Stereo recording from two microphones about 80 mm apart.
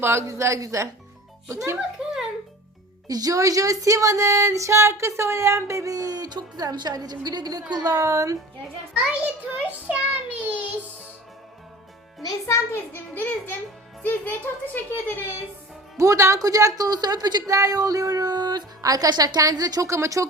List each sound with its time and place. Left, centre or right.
0.0 s speech: right
3.1 s speech: right
9.2 s a child's voice: centre
12.5 s speech: left
16.0 s speech: right
17.5 s speech: right